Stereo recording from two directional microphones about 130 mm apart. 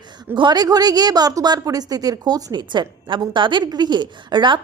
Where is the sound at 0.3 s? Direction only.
35° right (ahead or behind).